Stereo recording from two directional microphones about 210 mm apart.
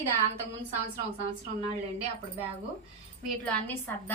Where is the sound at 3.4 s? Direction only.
10° left (ahead or behind).